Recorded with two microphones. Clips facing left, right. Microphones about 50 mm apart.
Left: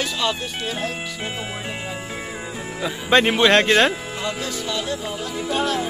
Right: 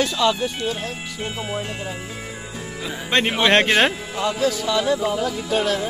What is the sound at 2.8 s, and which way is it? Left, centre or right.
Speech, centre.